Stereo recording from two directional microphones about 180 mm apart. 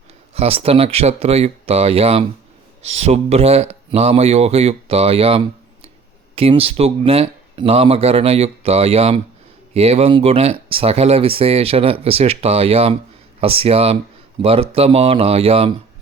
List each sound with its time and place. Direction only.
0.3 s speech: 35° right (ahead or behind)